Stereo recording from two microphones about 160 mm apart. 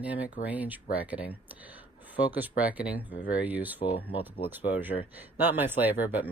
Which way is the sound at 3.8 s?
35° left (ahead or behind).